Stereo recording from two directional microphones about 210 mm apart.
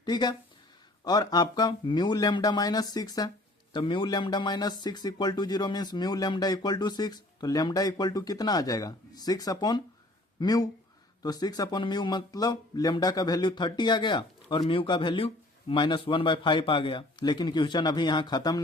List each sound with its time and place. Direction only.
0.0 s speech: 20° left (ahead or behind)